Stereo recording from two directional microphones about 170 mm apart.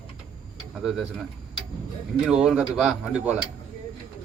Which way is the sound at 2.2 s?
5° right (ahead or behind).